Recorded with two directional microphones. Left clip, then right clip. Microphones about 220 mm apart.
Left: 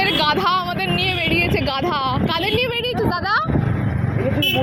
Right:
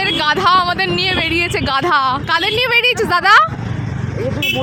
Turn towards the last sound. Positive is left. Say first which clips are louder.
# right 10 dB
turn(degrees=-40)  # may be behind; listen again after turning